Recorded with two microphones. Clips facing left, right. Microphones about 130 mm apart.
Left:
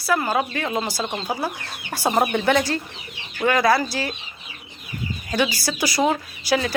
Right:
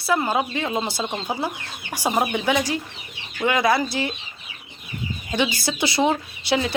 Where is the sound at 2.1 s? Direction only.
Centre (ahead or behind).